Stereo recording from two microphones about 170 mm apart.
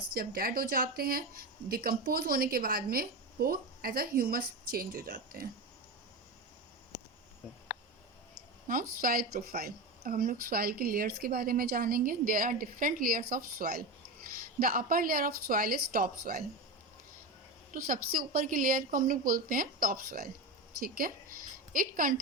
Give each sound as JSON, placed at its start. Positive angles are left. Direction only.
{"t": 0.1, "sound": "a woman's voice", "side_deg": -60}
{"t": 8.6, "sound": "a woman's voice", "side_deg": -55}
{"t": 17.7, "sound": "a woman's voice", "side_deg": -55}